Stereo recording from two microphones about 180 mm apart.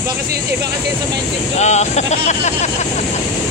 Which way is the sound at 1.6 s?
40° left (ahead or behind).